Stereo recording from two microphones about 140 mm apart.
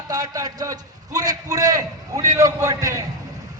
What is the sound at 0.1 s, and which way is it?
A man's voice, 25° right (ahead or behind).